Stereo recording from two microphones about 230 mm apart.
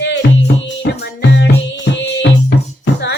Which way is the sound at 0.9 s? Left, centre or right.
Left.